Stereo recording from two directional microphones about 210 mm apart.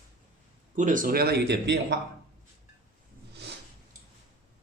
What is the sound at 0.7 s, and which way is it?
Speech, 35° right (ahead or behind).